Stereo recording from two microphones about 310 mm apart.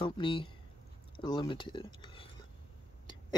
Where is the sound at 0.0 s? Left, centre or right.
Centre.